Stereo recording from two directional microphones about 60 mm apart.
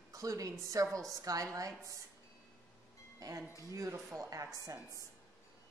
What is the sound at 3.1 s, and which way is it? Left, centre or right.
Speech, right.